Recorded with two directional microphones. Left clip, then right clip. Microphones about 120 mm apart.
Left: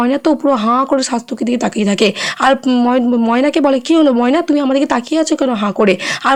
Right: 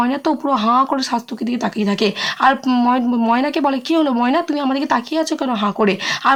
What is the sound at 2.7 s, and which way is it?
Speech, 30° left (ahead or behind).